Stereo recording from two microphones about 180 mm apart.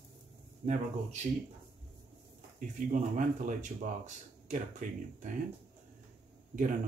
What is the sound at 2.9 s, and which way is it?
Speech, 45° right (ahead or behind).